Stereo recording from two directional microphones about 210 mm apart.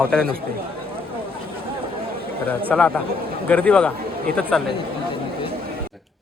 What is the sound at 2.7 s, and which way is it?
Speech, 5° left (ahead or behind).